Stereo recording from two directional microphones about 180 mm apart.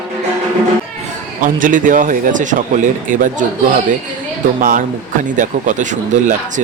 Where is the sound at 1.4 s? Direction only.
45° right (ahead or behind).